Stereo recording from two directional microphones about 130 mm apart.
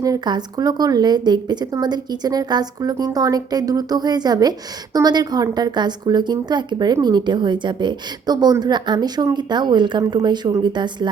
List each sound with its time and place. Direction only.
0.0 s a woman's voice: 30° right (ahead or behind)